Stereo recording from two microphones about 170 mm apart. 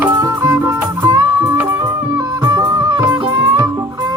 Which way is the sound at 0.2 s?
20° right (ahead or behind).